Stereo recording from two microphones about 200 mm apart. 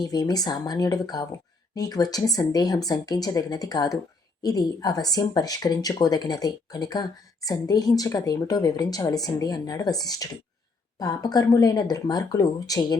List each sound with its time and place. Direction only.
0.0 s speech: 20° left (ahead or behind)